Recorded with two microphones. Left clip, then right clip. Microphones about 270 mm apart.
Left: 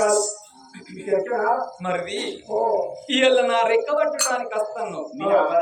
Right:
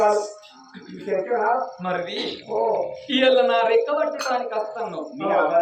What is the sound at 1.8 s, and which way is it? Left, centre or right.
Speech, centre.